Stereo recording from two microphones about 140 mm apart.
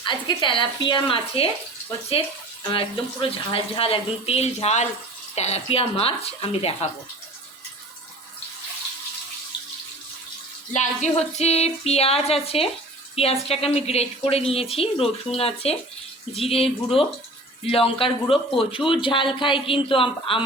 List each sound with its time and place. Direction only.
0.0 s speech: 35° left (ahead or behind)
2.6 s a woman's voice: 40° left (ahead or behind)
10.8 s a woman's voice: 55° left (ahead or behind)